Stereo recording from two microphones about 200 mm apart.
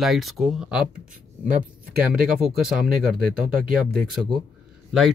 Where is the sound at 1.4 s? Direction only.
40° right (ahead or behind).